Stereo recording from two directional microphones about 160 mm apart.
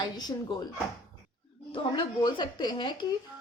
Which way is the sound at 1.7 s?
30° left (ahead or behind).